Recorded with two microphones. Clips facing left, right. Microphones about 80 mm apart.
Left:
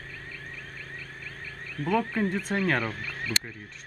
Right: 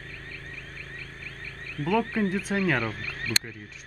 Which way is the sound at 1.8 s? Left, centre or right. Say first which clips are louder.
Right 1 dB; centre.